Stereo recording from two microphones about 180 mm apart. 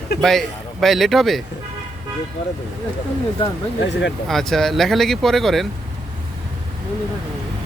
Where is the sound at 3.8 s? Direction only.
75° left (ahead or behind).